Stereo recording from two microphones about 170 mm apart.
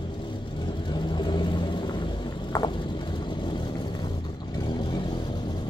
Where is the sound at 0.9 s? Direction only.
25° left (ahead or behind).